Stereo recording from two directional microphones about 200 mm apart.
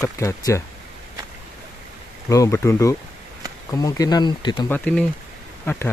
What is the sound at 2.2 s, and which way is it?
Speech, 15° left (ahead or behind).